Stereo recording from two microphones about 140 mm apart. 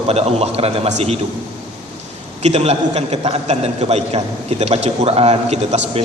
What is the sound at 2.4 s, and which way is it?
A man's voice, 50° right (ahead or behind).